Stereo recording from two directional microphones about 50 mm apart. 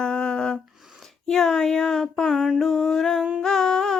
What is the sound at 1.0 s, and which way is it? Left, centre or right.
Speech, centre.